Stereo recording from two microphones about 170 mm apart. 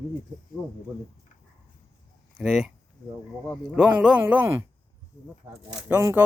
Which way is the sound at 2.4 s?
Centre (ahead or behind).